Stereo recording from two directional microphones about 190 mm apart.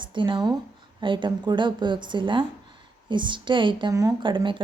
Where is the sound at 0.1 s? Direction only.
25° right (ahead or behind).